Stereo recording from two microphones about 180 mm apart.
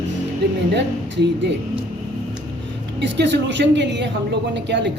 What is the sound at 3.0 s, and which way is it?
Speech, 75° right (ahead or behind).